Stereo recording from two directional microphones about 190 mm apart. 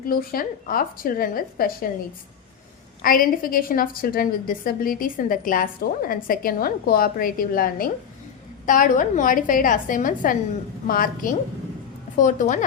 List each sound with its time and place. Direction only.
0.0 s a woman's voice: 50° left (ahead or behind)
3.0 s a woman's voice: 50° left (ahead or behind)